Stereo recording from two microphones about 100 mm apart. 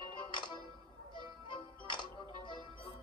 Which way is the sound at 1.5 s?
50° left (ahead or behind).